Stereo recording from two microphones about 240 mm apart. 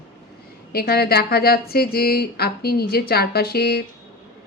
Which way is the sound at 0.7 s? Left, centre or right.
Left.